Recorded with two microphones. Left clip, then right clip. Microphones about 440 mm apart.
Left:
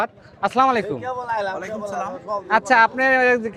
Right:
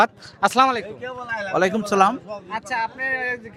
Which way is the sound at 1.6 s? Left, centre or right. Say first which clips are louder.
Right 9 dB; right.